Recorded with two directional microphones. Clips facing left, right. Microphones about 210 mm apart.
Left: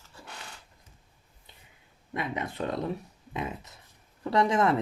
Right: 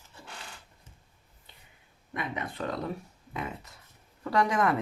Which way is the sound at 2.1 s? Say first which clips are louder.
Left 2 dB; 25° left (ahead or behind).